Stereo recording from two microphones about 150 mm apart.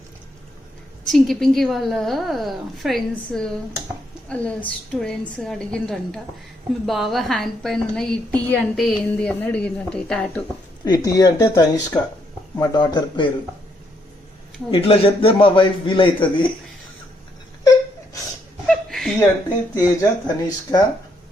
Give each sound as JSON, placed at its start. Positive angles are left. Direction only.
{"t": 1.0, "sound": "a woman's voice", "side_deg": 0}
{"t": 10.8, "sound": "speech", "side_deg": 25}
{"t": 14.7, "sound": "a man's voice", "side_deg": 40}
{"t": 17.6, "sound": "whimper", "side_deg": 25}
{"t": 18.7, "sound": "chuckle", "side_deg": 5}
{"t": 19.7, "sound": "speech", "side_deg": 25}